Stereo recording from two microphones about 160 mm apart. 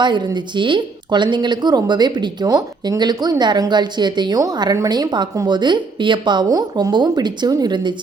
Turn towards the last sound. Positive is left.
turn(degrees=-30)  # may be behind; listen again after turning